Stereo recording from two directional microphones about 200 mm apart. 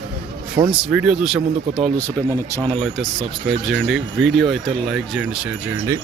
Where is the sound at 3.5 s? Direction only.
Centre (ahead or behind).